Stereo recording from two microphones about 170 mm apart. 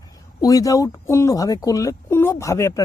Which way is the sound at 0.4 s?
20° left (ahead or behind).